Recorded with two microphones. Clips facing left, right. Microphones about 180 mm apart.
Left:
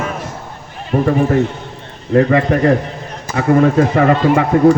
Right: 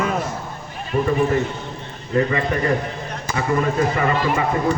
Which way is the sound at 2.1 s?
70° left (ahead or behind).